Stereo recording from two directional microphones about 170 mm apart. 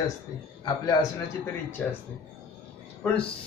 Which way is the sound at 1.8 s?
10° left (ahead or behind).